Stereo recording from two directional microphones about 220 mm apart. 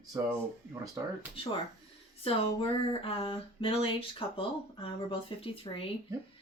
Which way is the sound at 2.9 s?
25° left (ahead or behind).